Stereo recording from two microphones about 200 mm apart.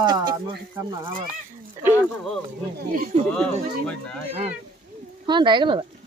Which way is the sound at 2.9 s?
45° right (ahead or behind).